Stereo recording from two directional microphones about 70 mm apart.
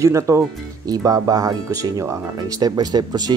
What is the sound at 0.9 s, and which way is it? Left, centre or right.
Speech, right.